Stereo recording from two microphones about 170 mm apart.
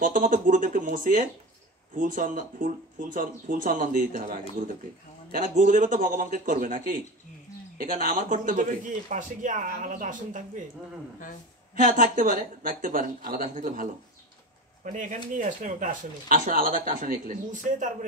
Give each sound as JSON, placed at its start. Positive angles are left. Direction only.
{"t": 0.0, "sound": "speech", "side_deg": -55}
{"t": 11.7, "sound": "speech", "side_deg": -55}
{"t": 14.9, "sound": "speech", "side_deg": -50}